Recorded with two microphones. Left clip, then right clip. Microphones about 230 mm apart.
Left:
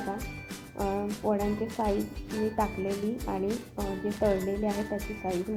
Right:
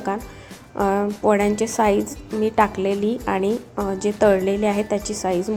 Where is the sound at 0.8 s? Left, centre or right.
Right.